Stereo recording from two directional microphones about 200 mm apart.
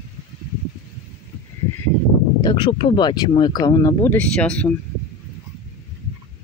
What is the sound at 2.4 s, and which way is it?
Speech, 25° left (ahead or behind).